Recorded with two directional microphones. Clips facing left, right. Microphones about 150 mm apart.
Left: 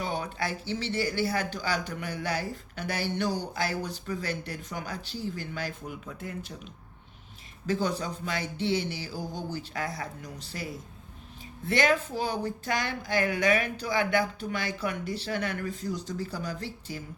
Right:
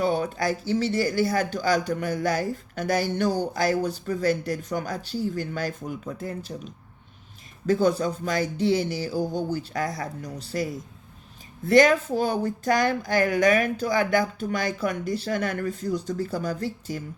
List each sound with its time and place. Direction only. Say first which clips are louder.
0.0 s speech: right 8 dB; 45° right (ahead or behind)
7.7 s speech: right 7 dB; 45° right (ahead or behind)
11.7 s speech: right 8 dB; 40° right (ahead or behind)